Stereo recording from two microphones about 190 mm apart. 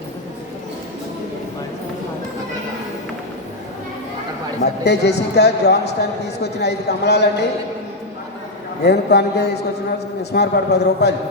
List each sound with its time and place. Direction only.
4.8 s a man's voice: 60° left (ahead or behind)
8.8 s a man's voice: 60° left (ahead or behind)